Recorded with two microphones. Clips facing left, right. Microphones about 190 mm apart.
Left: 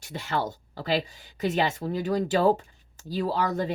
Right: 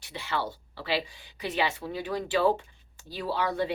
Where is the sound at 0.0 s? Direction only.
45° left (ahead or behind).